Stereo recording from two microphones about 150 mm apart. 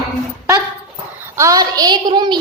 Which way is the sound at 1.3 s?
20° right (ahead or behind).